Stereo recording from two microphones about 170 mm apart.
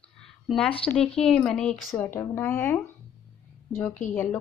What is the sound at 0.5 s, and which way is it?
Speech, 5° left (ahead or behind).